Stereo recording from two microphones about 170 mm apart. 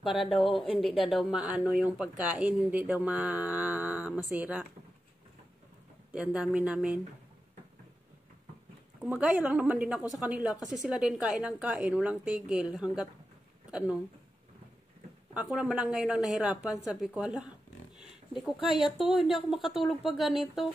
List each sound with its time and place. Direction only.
0.0 s speech: centre (ahead or behind)
6.1 s speech: 5° right (ahead or behind)
9.0 s a woman's voice: 5° right (ahead or behind)
15.3 s a woman's voice: 5° right (ahead or behind)
18.9 s a woman's voice: 5° right (ahead or behind)